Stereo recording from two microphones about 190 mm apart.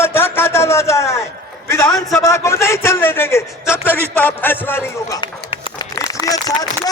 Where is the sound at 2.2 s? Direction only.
15° left (ahead or behind).